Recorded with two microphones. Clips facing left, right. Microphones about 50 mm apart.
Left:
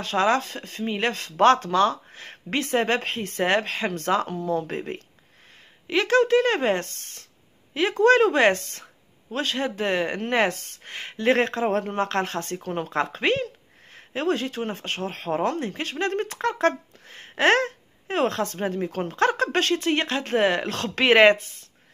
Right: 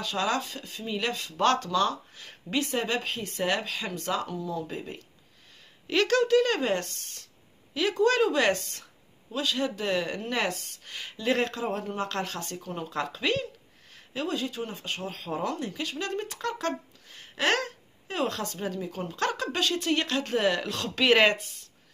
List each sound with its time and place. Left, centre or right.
0.0 s speech: left
1.4 s speech: left
5.9 s speech: left
10.8 s a sound: left
11.2 s speech: left
14.2 s speech: left
19.8 s speech: left
21.1 s speech: left